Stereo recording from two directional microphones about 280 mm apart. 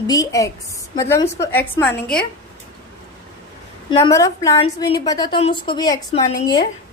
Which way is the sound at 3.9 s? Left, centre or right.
Centre.